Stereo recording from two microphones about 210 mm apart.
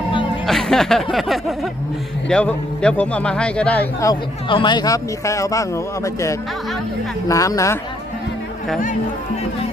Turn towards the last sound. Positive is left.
turn(degrees=15)  # may be behind; listen again after turning